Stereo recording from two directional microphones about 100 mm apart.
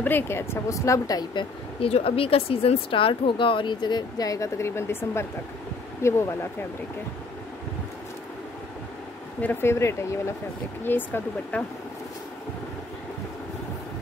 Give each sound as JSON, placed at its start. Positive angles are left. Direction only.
{"t": 0.0, "sound": "speech", "side_deg": 20}
{"t": 1.3, "sound": "speech", "side_deg": 55}
{"t": 1.9, "sound": "speech", "side_deg": 80}
{"t": 9.4, "sound": "speech", "side_deg": 20}